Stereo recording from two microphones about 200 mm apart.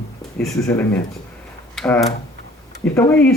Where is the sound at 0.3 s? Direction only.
10° left (ahead or behind).